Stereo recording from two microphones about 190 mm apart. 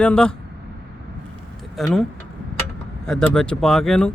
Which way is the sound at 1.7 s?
Centre (ahead or behind).